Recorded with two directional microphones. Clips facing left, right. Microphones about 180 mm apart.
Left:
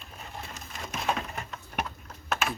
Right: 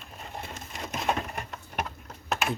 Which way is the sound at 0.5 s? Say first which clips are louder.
Right 2 dB; 20° right (ahead or behind).